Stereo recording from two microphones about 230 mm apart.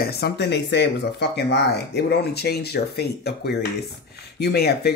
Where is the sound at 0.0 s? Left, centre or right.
Left.